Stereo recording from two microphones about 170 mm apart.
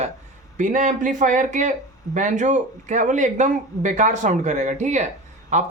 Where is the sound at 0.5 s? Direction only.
50° right (ahead or behind).